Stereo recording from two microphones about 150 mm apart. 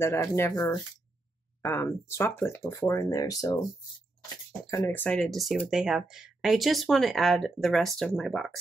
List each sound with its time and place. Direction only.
0.0 s speech: 20° left (ahead or behind)
4.6 s speech: 20° left (ahead or behind); by 8.5 s 5° left (ahead or behind)